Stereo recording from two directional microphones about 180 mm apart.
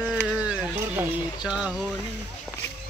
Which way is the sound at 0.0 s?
5° right (ahead or behind).